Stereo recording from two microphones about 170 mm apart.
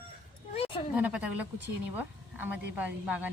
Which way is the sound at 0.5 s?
35° left (ahead or behind).